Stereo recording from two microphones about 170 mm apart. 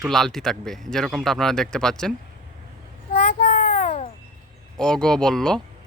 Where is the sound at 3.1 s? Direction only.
50° left (ahead or behind).